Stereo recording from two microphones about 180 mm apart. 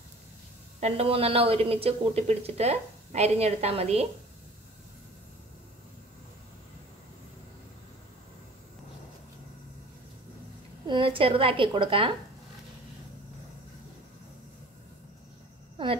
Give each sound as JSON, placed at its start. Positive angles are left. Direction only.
{"t": 0.7, "sound": "speech", "side_deg": -35}
{"t": 10.9, "sound": "a woman's voice", "side_deg": -30}